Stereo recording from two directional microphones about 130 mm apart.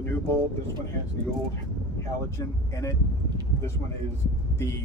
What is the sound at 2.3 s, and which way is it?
Speech, 25° left (ahead or behind).